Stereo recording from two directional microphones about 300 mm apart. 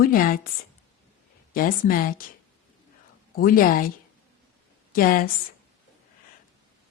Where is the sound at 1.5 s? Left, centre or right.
Left.